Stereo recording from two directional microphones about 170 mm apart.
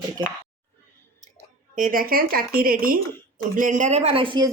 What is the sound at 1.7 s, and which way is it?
A woman's voice, 55° right (ahead or behind).